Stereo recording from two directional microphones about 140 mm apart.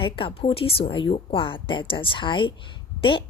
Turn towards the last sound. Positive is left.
turn(degrees=40)  # may be behind; listen again after turning